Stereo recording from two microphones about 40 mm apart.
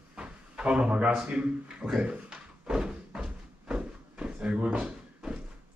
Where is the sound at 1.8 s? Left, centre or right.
Centre.